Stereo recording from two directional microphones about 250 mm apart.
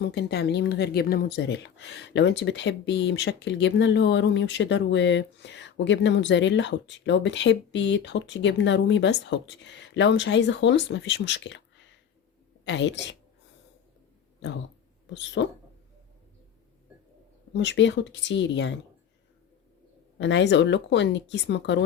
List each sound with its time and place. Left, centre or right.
0.0 s speech: left
12.6 s speech: left
15.1 s speech: left
17.5 s speech: left
20.1 s speech: left